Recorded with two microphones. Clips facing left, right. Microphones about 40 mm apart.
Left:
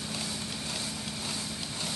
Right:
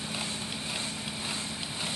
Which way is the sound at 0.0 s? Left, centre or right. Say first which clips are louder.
Right 1 dB; right.